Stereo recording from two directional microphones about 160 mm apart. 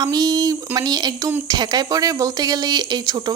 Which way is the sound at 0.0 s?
25° right (ahead or behind).